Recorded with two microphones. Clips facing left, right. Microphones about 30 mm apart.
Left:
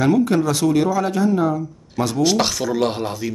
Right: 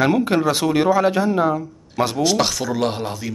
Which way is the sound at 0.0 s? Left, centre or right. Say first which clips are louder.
Even; right.